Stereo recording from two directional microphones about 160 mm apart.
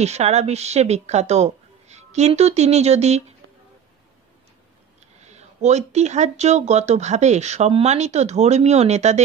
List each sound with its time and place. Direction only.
0.0 s speech: 45° right (ahead or behind)
5.2 s speech: 45° right (ahead or behind)